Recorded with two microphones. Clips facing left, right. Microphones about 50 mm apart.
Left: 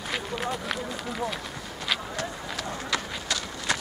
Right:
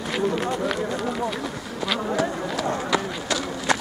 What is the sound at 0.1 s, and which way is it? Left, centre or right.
Speech, centre.